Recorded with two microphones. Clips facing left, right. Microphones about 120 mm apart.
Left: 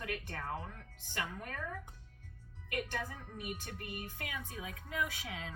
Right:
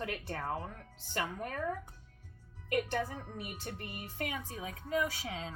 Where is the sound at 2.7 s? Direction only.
35° right (ahead or behind).